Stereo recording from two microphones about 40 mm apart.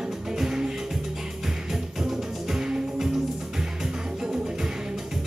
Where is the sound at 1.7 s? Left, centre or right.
Centre.